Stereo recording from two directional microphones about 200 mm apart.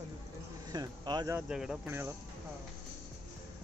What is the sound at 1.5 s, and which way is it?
Speech, 5° right (ahead or behind).